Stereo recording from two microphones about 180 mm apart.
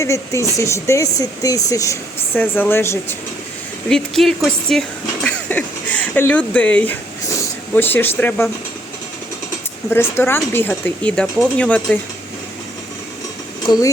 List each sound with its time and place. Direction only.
0.0 s speech: 15° left (ahead or behind)
3.8 s speech: 5° left (ahead or behind)
9.9 s speech: 15° left (ahead or behind)